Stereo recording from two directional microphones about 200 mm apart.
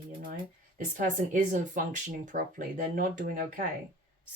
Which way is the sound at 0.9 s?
40° right (ahead or behind).